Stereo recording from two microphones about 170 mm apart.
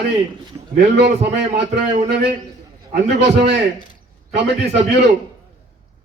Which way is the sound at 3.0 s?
85° right.